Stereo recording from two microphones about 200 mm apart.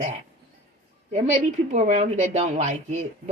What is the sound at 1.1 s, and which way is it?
Speech, 35° right (ahead or behind).